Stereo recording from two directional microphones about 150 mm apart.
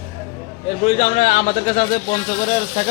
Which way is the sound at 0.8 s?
50° left (ahead or behind).